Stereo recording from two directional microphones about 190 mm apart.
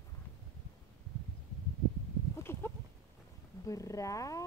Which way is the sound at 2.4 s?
10° left (ahead or behind).